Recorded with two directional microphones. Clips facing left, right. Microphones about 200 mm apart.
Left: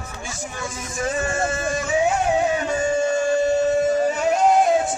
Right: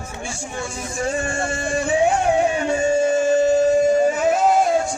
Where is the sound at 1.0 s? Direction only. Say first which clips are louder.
Even; 30° right (ahead or behind).